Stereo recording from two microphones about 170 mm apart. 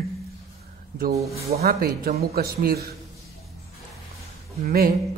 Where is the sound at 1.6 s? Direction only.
60° right (ahead or behind).